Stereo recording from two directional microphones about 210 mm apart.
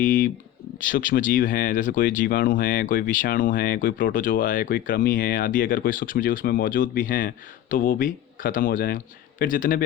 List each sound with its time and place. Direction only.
0.0 s speech: 40° left (ahead or behind)